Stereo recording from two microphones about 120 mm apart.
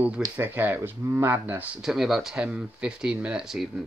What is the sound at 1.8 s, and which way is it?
Speech, 5° right (ahead or behind).